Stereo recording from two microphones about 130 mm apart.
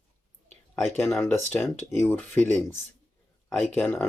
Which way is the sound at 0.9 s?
20° left (ahead or behind).